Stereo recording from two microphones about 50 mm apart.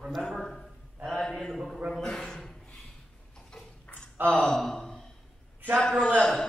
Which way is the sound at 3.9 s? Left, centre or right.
Left.